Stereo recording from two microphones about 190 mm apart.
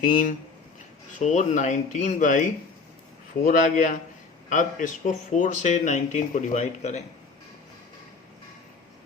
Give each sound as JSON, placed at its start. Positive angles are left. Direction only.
{"t": 0.0, "sound": "speech", "side_deg": 45}